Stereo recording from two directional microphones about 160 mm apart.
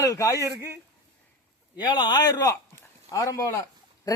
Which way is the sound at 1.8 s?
30° left (ahead or behind).